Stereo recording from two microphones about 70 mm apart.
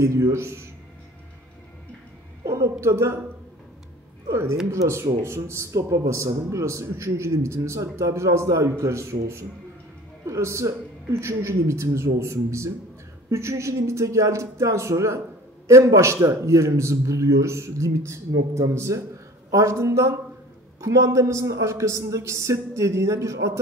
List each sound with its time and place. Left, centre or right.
0.0 s a man's voice: right
2.4 s a sound: right
2.8 s a man's voice: right
4.3 s a man's voice: right